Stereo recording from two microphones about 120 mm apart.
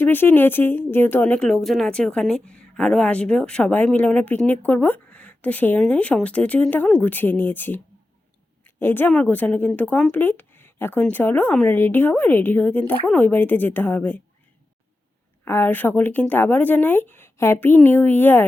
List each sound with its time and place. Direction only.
0.0 s speech: 15° left (ahead or behind)
15.4 s speech: 15° left (ahead or behind)